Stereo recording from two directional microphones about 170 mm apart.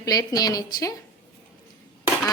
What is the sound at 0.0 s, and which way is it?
Speech, 20° left (ahead or behind).